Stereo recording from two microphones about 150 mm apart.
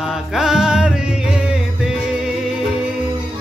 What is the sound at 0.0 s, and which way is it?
Music, 5° right (ahead or behind).